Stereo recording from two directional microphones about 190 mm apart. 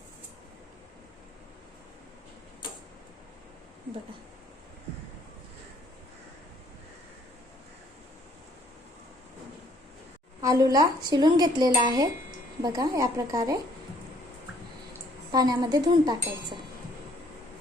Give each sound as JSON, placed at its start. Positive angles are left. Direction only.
{"t": 10.4, "sound": "speech", "side_deg": -20}
{"t": 15.3, "sound": "speech", "side_deg": -20}